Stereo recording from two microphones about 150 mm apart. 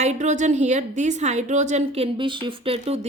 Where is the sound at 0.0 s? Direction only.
50° right (ahead or behind).